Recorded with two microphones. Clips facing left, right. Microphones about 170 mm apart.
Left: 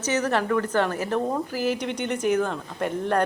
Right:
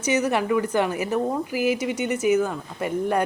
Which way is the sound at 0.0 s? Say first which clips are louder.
Right 2 dB; 10° right (ahead or behind).